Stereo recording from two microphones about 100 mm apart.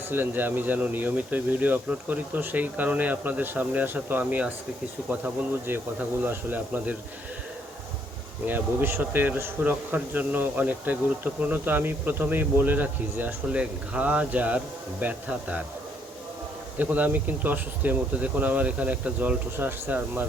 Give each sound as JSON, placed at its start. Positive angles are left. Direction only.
{"t": 0.1, "sound": "a man's voice", "side_deg": -20}
{"t": 8.4, "sound": "a man's voice", "side_deg": -20}
{"t": 16.7, "sound": "a man's voice", "side_deg": -15}